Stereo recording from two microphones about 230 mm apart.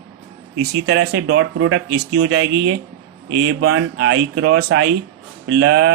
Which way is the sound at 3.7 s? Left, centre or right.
Right.